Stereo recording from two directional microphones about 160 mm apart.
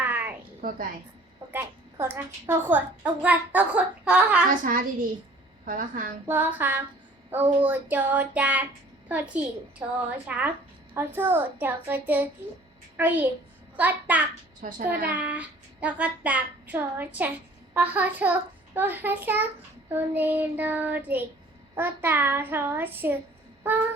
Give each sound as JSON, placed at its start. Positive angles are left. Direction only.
{"t": 0.0, "sound": "a sound", "side_deg": -10}
{"t": 1.5, "sound": "child singing", "side_deg": -15}
{"t": 4.6, "sound": "a woman's voice", "side_deg": -55}
{"t": 6.2, "sound": "child singing", "side_deg": -10}
{"t": 14.6, "sound": "a child's voice", "side_deg": -55}
{"t": 15.1, "sound": "child singing", "side_deg": -10}